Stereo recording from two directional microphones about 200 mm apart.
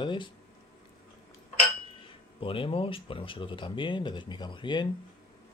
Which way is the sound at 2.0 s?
25° left (ahead or behind).